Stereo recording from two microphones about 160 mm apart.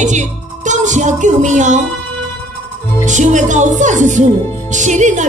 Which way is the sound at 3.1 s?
50° right (ahead or behind).